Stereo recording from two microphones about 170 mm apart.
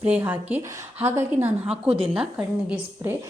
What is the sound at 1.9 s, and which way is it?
Speech, 35° right (ahead or behind).